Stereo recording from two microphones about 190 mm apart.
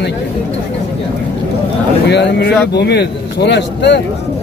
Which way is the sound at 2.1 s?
65° left (ahead or behind).